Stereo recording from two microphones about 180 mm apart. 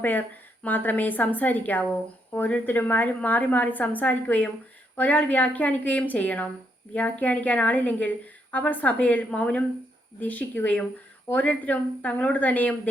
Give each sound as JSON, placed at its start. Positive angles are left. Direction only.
{"t": 0.0, "sound": "a woman's voice", "side_deg": 10}